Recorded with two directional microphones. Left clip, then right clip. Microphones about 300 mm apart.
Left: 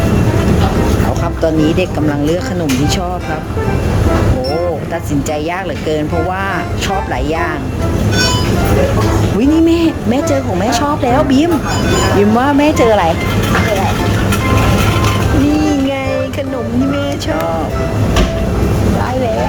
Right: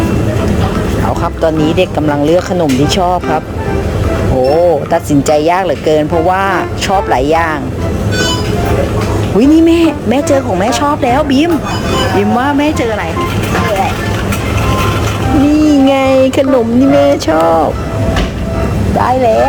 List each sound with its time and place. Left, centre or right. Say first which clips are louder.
1.4 s speech: right 2 dB; centre
4.9 s speech: right 8 dB; centre
7.1 s speech: right 7 dB; centre
9.4 s speech: right 4 dB; centre
15.6 s music: right 6 dB; centre
17.0 s speech: right 8 dB; centre